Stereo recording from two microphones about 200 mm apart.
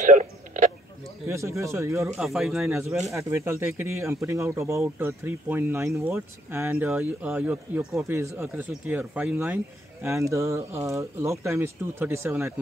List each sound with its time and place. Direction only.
0.0 s a sound: 40° right (ahead or behind)
1.2 s speech: 15° right (ahead or behind)
2.2 s speech: centre (ahead or behind)
3.2 s speech: 15° right (ahead or behind)